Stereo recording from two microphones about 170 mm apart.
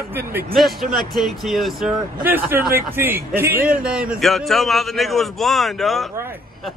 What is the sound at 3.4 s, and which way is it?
Speech, 60° right (ahead or behind).